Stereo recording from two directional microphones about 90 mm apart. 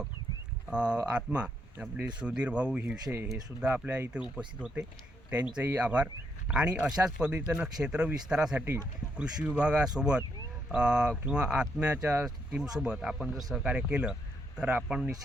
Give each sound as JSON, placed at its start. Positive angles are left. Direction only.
{"t": 0.7, "sound": "speech", "side_deg": -10}
{"t": 3.8, "sound": "speech", "side_deg": -20}